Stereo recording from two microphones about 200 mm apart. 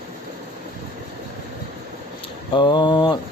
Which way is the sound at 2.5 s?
20° left (ahead or behind).